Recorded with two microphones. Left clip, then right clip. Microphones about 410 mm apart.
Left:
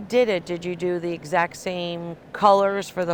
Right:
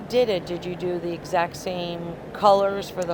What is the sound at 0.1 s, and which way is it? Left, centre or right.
Speech, left.